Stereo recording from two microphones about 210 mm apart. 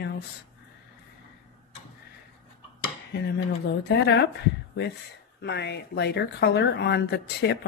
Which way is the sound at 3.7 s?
55° left (ahead or behind).